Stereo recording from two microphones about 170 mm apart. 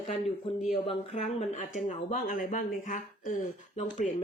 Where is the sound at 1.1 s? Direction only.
40° left (ahead or behind).